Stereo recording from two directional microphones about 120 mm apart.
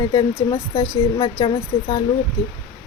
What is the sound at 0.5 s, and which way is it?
Speech, 30° left (ahead or behind).